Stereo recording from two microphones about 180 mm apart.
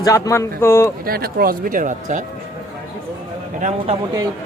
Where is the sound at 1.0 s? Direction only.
55° right (ahead or behind).